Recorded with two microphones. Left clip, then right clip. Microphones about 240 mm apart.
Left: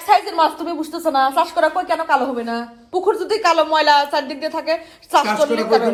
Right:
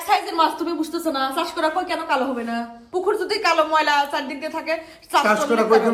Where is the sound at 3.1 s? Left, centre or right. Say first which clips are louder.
Left 2 dB; left.